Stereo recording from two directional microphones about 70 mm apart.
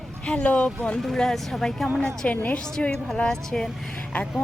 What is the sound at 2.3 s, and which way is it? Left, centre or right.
Speech, centre.